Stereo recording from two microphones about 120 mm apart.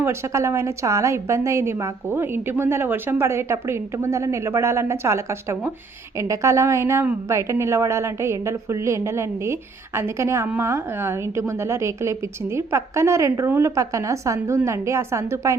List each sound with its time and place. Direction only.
0.0 s a woman's voice: 20° right (ahead or behind)